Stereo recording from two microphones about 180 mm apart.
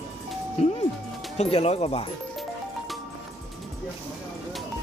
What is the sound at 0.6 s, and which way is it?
Music, 35° left (ahead or behind).